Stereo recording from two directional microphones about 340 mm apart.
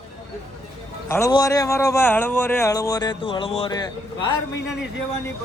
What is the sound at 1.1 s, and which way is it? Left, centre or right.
Speech, centre.